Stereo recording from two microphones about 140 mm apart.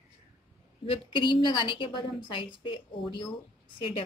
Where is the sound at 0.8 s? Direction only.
40° left (ahead or behind).